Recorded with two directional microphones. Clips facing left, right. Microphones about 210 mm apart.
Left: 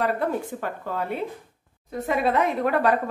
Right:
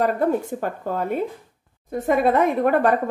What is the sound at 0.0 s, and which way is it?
A woman's voice, 45° right (ahead or behind).